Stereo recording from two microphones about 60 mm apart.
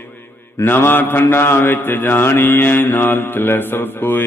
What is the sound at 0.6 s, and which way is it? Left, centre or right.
A man's voice, left.